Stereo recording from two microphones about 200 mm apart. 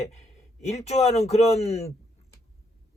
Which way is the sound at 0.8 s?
30° left (ahead or behind).